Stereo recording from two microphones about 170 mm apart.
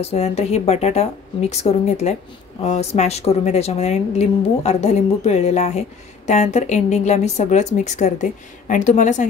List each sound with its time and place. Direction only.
0.0 s speech: 40° left (ahead or behind)